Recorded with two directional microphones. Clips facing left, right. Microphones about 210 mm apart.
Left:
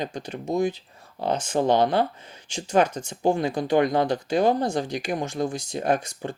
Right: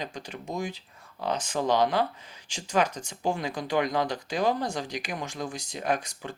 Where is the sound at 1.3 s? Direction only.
25° left (ahead or behind).